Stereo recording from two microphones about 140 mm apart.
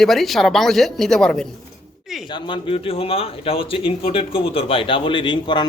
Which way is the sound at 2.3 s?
40° left (ahead or behind).